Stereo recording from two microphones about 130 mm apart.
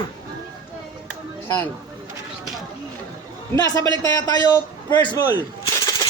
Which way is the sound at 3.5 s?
25° left (ahead or behind).